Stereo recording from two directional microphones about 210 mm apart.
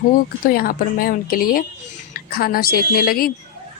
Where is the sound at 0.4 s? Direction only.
45° left (ahead or behind).